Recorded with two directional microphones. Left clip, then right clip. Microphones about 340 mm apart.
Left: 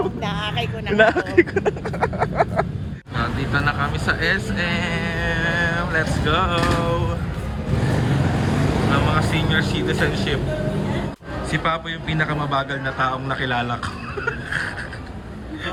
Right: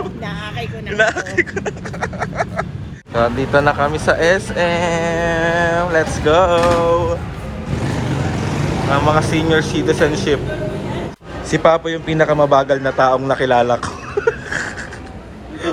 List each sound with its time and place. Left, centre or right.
0.0 s speech: left
3.2 s speech: centre
8.9 s speech: centre
12.1 s speech: centre